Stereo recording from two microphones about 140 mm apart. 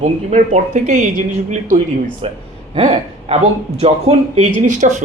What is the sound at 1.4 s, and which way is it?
Speech, 70° right (ahead or behind).